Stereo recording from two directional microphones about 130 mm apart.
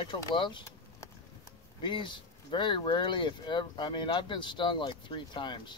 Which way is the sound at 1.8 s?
40° left (ahead or behind).